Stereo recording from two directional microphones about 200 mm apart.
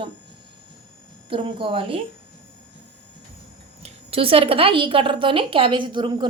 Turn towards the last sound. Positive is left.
turn(degrees=-25)  # may be behind; listen again after turning